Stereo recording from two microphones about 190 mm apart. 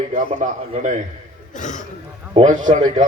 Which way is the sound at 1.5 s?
40° left (ahead or behind).